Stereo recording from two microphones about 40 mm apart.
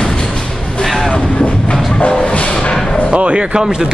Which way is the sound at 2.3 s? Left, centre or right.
Left.